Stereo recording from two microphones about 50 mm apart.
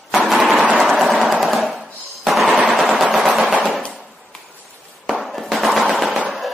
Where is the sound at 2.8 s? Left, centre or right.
Centre.